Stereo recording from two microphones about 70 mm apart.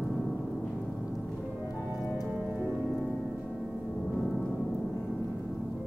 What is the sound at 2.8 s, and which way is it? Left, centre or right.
Music, centre.